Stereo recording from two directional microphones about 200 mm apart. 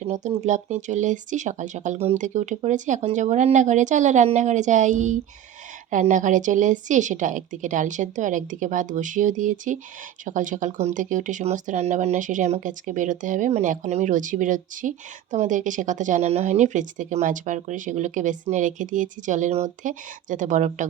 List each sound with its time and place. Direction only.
0.0 s speech: 35° right (ahead or behind)